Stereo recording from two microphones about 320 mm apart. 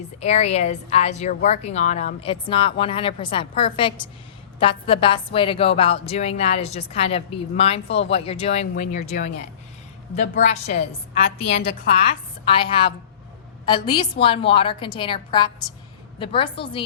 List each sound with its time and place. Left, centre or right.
0.2 s a woman's voice: centre
10.4 s a woman's voice: left
11.6 s a woman's voice: left
12.5 s a woman's voice: centre